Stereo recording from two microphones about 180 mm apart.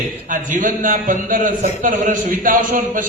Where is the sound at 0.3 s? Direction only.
45° right (ahead or behind).